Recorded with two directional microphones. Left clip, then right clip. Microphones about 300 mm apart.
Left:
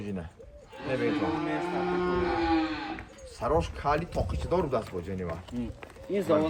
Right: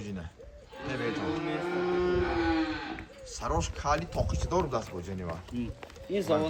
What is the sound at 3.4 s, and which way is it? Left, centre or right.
Speech, centre.